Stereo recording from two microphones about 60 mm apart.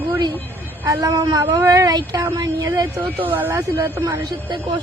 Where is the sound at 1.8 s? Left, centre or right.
Right.